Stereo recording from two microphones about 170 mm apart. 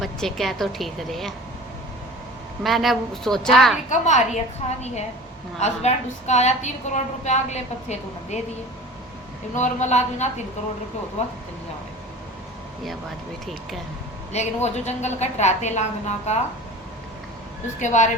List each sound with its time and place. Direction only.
0.0 s a woman's voice: centre (ahead or behind)
2.6 s a woman's voice: centre (ahead or behind)
3.8 s a woman's voice: 45° left (ahead or behind)
9.6 s a woman's voice: 45° left (ahead or behind)
14.3 s a woman's voice: 40° left (ahead or behind)
17.7 s a woman's voice: 45° left (ahead or behind)